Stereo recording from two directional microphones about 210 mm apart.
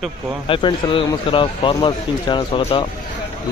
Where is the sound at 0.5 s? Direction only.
25° left (ahead or behind).